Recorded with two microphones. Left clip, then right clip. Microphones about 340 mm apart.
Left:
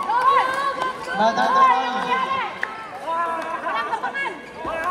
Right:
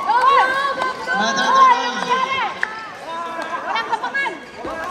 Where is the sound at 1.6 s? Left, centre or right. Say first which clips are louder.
Right 5 dB; centre.